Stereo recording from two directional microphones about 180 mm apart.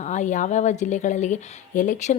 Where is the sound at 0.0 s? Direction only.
40° left (ahead or behind).